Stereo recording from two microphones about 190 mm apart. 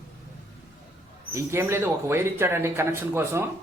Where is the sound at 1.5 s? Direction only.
15° right (ahead or behind).